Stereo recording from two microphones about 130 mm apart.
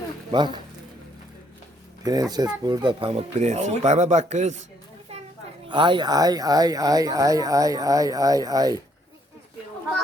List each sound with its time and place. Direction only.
0.3 s speech: 35° right (ahead or behind)
2.0 s speech: 30° right (ahead or behind); by 4.6 s 65° right (ahead or behind)
5.6 s speech: 40° right (ahead or behind)